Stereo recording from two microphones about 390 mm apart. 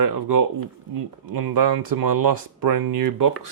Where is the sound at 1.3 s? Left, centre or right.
Right.